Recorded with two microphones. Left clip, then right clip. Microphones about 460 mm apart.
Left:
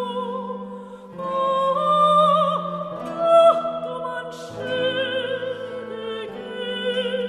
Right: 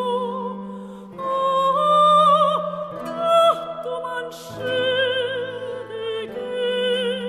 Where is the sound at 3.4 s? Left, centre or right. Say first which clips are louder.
Left 2 dB; right.